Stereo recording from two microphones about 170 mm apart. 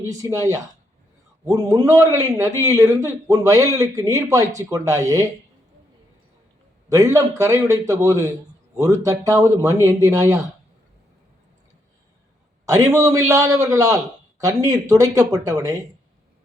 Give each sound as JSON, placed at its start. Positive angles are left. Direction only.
{"t": 0.0, "sound": "a man's voice", "side_deg": -20}
{"t": 6.9, "sound": "a man's voice", "side_deg": -20}
{"t": 12.6, "sound": "a man's voice", "side_deg": -20}